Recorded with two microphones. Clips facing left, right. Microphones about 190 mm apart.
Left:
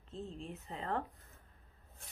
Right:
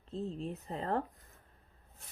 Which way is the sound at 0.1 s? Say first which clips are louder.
Right 6 dB; 35° right (ahead or behind).